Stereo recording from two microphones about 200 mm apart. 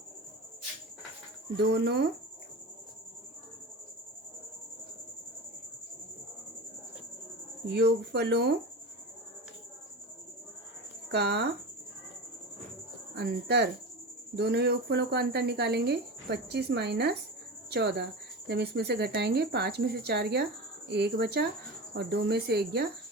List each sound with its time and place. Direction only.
1.5 s speech: 55° right (ahead or behind)
7.7 s speech: 55° right (ahead or behind)
11.1 s speech: 55° right (ahead or behind)
13.1 s speech: 55° right (ahead or behind)